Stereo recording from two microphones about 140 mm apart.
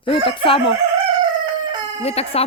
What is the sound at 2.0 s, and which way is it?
Speech, 45° left (ahead or behind).